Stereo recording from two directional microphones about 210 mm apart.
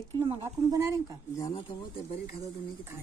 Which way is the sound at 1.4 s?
15° left (ahead or behind).